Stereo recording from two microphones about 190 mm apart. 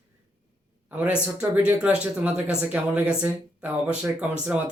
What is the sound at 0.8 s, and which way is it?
A man's voice, 10° right (ahead or behind).